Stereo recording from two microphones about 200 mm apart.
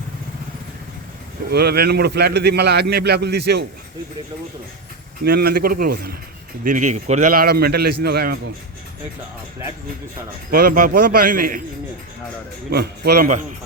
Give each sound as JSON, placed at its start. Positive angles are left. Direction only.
{"t": 1.5, "sound": "a man's voice", "side_deg": -50}
{"t": 5.2, "sound": "a man's voice", "side_deg": -50}
{"t": 6.7, "sound": "a man's voice", "side_deg": -40}
{"t": 10.5, "sound": "a man's voice", "side_deg": -45}
{"t": 12.7, "sound": "a man's voice", "side_deg": -50}